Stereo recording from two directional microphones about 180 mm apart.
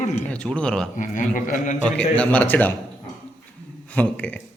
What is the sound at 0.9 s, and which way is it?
Speech, 45° left (ahead or behind).